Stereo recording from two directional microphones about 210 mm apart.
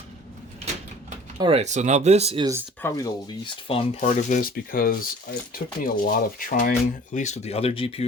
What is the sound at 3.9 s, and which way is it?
Speech, 40° left (ahead or behind).